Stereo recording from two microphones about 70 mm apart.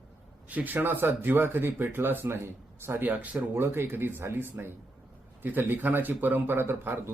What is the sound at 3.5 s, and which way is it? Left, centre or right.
Speech, right.